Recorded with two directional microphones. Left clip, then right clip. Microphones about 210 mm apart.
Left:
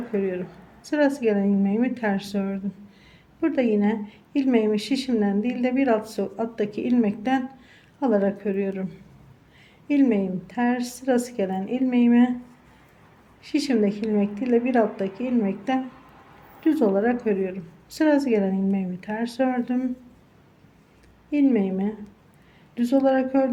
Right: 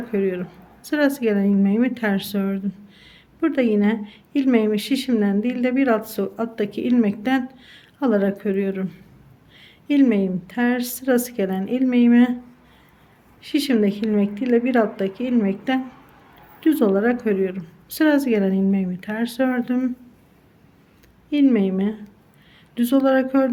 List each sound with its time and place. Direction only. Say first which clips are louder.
0.1 s a woman's voice: right 4 dB; 20° right (ahead or behind)
13.4 s a woman's voice: right 3 dB; 20° right (ahead or behind)
21.2 s a woman's voice: right 3 dB; 20° right (ahead or behind)